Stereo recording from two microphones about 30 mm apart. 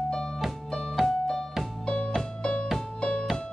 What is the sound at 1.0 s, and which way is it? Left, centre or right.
Music, centre.